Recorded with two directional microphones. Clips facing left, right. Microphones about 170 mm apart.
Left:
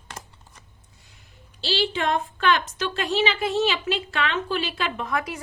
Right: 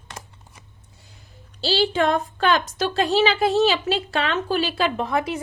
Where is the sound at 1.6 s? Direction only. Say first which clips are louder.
Right 5 dB; 40° right (ahead or behind).